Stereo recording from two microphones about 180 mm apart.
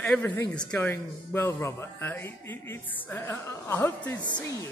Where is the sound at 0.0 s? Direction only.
10° left (ahead or behind).